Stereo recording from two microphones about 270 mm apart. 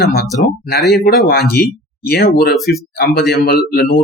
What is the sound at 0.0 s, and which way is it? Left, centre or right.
Speech, left.